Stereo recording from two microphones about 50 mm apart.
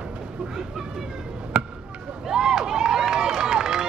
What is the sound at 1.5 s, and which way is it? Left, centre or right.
Basketball bounce, right.